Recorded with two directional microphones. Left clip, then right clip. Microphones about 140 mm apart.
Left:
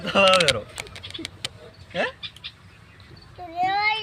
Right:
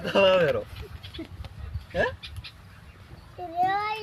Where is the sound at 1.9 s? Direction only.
35° right (ahead or behind).